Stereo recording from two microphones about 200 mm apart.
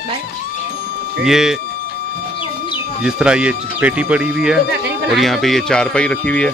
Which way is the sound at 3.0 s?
5° right (ahead or behind).